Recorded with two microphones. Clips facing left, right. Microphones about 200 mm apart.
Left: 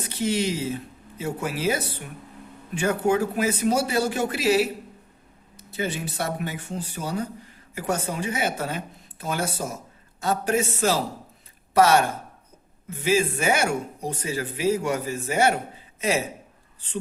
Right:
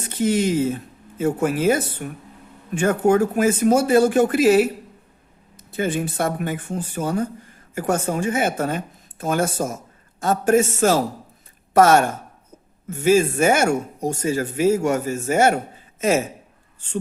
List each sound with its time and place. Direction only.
0.0 s speech: 50° right (ahead or behind)